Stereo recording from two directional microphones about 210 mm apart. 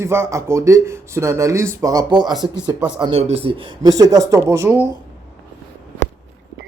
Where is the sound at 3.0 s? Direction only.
30° right (ahead or behind); by 4.8 s 15° right (ahead or behind).